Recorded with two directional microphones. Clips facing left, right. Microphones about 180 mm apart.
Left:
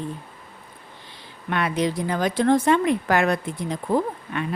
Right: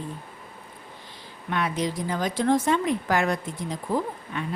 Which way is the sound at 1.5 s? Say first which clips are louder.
Left 3 dB; 65° left (ahead or behind).